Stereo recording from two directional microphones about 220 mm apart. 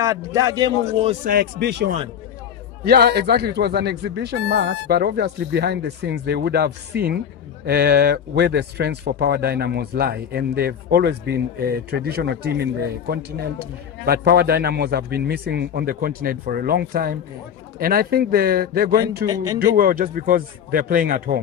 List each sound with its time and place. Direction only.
0.0 s a man's voice: 15° right (ahead or behind)
1.2 s speech: 40° right (ahead or behind)
19.2 s a man's voice: 15° right (ahead or behind)
19.6 s a man's voice: 40° right (ahead or behind)